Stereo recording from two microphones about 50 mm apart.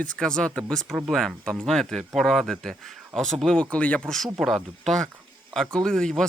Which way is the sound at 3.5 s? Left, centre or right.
Left.